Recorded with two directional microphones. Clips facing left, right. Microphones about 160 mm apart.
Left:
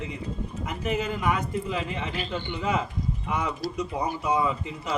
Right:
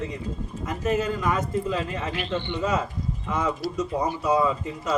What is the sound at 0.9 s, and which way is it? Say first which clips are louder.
Speech: right 1 dB; 15° left (ahead or behind).